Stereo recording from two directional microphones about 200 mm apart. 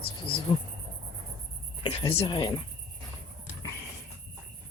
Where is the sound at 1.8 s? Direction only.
30° left (ahead or behind).